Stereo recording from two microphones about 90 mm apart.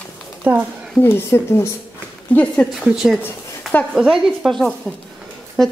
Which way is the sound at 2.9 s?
Centre (ahead or behind).